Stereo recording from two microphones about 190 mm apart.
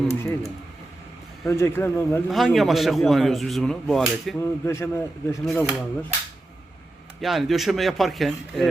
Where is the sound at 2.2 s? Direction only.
Centre (ahead or behind).